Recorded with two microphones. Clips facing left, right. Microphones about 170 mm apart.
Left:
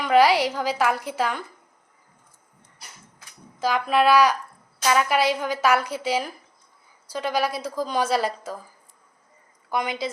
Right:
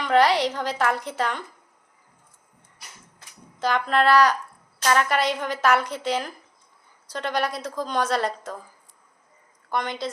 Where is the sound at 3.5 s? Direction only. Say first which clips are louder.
Left 1 dB; 5° left (ahead or behind).